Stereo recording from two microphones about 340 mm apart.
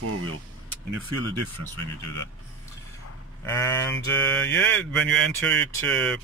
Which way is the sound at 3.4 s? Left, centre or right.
Centre.